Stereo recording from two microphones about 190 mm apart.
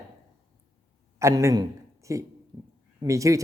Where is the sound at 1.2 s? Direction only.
15° right (ahead or behind).